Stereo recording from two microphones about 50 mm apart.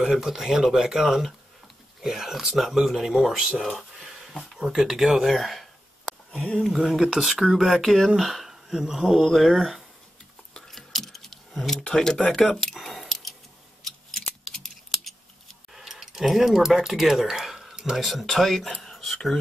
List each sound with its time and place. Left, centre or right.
0.0 s speech: centre
10.7 s keys jangling: centre
11.8 s speech: centre
12.9 s a sound: centre
15.7 s speech: centre
18.0 s speech: centre
18.8 s a sound: centre